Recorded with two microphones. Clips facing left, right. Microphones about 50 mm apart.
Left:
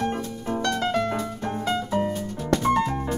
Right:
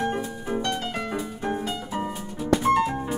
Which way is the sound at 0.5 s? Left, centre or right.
Right.